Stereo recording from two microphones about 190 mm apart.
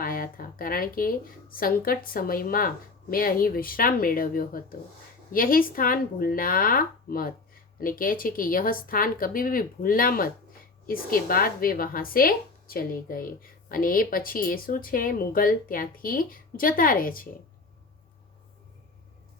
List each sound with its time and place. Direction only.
0.0 s speech: 50° left (ahead or behind)